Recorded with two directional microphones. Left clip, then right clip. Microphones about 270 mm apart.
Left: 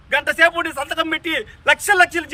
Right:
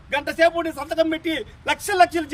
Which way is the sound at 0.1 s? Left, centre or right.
Centre.